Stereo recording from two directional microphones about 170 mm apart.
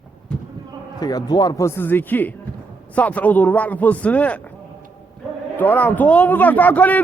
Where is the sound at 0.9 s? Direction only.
25° left (ahead or behind).